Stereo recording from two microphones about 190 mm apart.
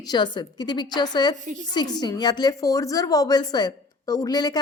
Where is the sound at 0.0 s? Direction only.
20° left (ahead or behind).